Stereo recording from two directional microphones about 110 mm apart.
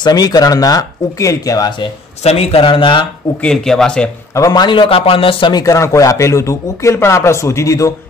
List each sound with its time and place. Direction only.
0.0 s speech: 35° left (ahead or behind)
2.2 s a man's voice: 65° left (ahead or behind); by 3.1 s 50° left (ahead or behind)
3.4 s speech: 5° left (ahead or behind)
4.4 s a man's voice: 40° left (ahead or behind); by 5.5 s 55° left (ahead or behind)
5.5 s speech: 30° left (ahead or behind)